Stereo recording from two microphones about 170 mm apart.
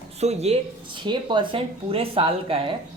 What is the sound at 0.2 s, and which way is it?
Speech, 40° right (ahead or behind).